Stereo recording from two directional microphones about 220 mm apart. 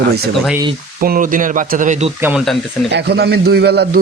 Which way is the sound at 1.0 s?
40° right (ahead or behind).